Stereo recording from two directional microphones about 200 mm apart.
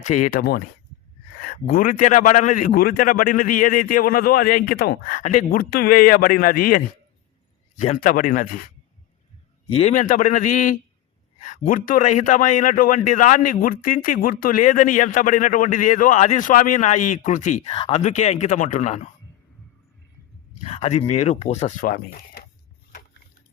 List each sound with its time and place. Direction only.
0.0 s a man's voice: 40° left (ahead or behind)
9.6 s a man's voice: 30° left (ahead or behind)
20.6 s a man's voice: 30° left (ahead or behind)